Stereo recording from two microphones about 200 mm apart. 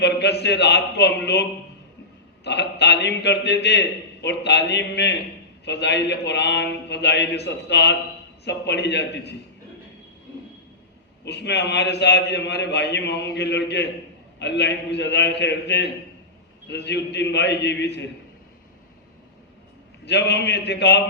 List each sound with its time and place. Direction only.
0.0 s a man's voice: 60° left (ahead or behind)
11.3 s a man's voice: 60° left (ahead or behind)
20.1 s a man's voice: 55° left (ahead or behind)